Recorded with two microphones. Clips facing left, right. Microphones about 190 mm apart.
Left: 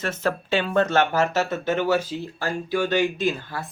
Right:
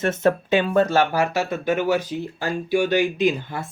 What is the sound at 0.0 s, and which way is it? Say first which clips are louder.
Speech: right 6 dB; 25° right (ahead or behind).